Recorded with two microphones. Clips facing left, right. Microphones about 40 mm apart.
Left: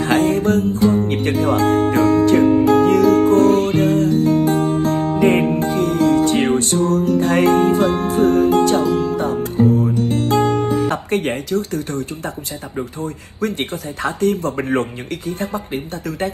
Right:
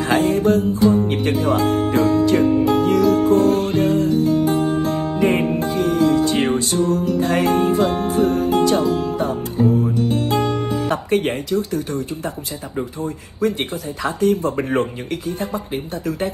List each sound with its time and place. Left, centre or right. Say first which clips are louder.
0.0 s speech: left 1 dB; left
1.1 s music: left 1 dB; left
13.4 s speech: right 1 dB; left
14.6 s a man's voice: even; left
15.2 s speech: left 2 dB; left